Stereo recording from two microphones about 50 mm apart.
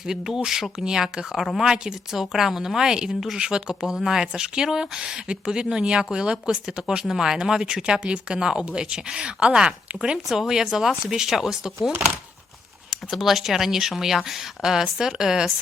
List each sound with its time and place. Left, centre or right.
0.0 s speech: centre
10.2 s speech: centre
10.5 s speech: centre
12.9 s speech: centre